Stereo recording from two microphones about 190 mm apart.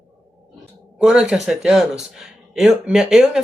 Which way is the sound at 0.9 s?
5° right (ahead or behind).